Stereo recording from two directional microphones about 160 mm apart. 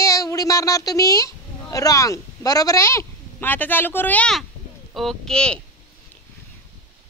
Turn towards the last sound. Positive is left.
turn(degrees=5)  # may be behind; listen again after turning